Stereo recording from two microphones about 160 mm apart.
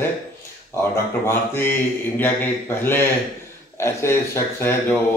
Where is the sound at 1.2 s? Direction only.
15° left (ahead or behind).